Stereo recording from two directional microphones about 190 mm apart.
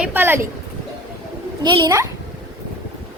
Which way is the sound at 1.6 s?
25° right (ahead or behind).